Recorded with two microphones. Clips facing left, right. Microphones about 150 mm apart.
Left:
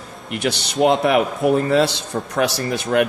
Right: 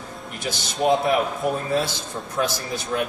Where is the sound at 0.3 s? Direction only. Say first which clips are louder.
Left 9 dB; 70° left (ahead or behind).